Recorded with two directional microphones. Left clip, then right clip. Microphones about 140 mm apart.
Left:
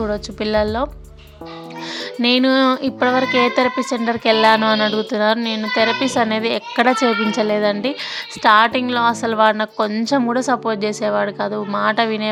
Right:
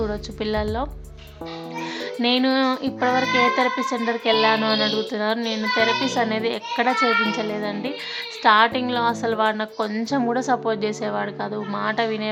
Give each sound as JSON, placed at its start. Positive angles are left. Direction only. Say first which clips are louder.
{"t": 0.0, "sound": "speech", "louder": "left 4 dB", "side_deg": 30}
{"t": 2.2, "sound": "speech", "louder": "left 5 dB", "side_deg": 35}